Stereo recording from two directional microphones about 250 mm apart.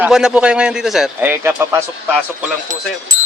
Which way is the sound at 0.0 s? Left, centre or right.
Centre.